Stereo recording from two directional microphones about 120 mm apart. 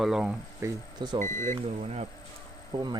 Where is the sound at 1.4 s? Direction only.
80° right.